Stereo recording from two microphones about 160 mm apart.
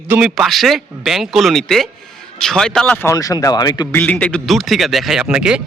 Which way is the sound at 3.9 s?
10° left (ahead or behind).